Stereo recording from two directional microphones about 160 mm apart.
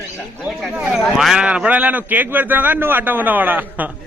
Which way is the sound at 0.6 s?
Centre (ahead or behind).